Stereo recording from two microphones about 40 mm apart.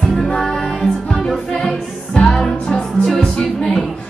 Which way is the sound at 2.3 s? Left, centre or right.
Centre.